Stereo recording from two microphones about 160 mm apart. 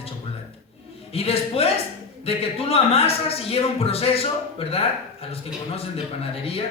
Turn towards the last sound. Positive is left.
turn(degrees=35)  # may be behind; listen again after turning